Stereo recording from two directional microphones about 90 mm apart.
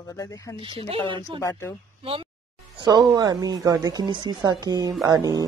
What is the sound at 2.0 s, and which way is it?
Speech, 90° right.